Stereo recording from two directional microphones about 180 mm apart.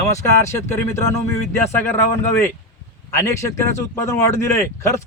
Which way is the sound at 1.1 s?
15° left (ahead or behind).